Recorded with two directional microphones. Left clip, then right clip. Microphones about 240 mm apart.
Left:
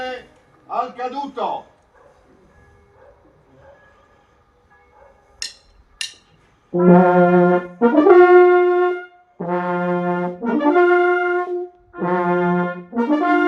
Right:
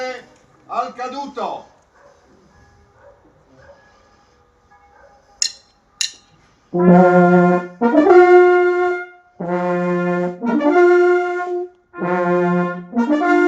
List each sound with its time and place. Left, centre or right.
0.7 s a man's voice: right
5.4 s a sound: right
6.7 s brass instrument: right